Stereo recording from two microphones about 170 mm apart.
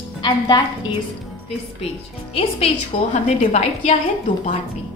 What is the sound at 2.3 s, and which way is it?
A woman's voice, 35° left (ahead or behind).